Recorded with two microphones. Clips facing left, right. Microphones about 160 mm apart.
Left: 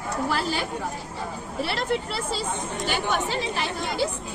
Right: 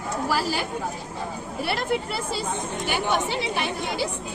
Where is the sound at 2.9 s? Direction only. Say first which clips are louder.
Right 2 dB; 15° right (ahead or behind).